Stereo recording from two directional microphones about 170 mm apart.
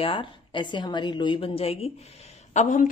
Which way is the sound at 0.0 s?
30° left (ahead or behind).